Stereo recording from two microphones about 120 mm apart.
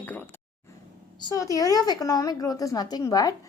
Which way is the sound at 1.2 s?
30° left (ahead or behind).